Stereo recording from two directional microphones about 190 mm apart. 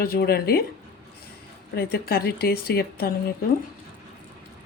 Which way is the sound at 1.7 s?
55° left (ahead or behind).